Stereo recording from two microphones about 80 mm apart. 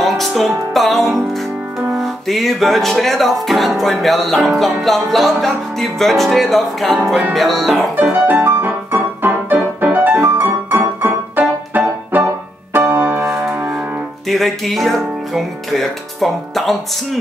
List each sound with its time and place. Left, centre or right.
0.0 s music: centre
7.9 s music: right
14.2 s music: centre